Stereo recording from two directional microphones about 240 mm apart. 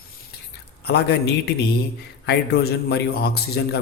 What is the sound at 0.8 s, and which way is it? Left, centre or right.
Speech, left.